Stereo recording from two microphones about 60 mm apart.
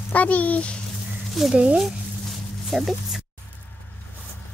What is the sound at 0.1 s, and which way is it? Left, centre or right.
Speech, left.